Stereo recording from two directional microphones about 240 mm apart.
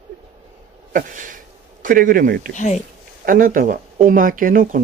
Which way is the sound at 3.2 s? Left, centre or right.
Right.